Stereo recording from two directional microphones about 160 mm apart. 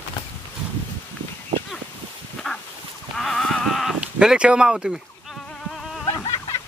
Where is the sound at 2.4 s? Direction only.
Centre (ahead or behind).